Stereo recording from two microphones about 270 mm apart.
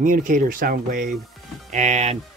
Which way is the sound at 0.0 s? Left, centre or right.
Right.